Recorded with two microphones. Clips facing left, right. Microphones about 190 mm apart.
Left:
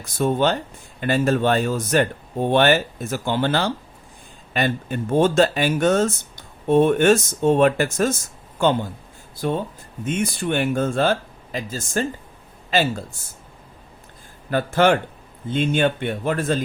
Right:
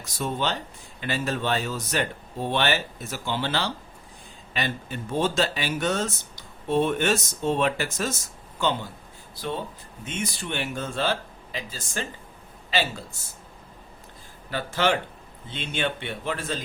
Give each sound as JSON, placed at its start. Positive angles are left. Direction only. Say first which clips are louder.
{"t": 0.0, "sound": "speech", "louder": "left 8 dB", "side_deg": 50}
{"t": 14.5, "sound": "speech", "louder": "left 7 dB", "side_deg": 50}